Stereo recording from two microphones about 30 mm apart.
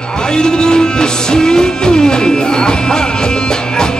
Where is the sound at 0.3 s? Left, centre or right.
Left.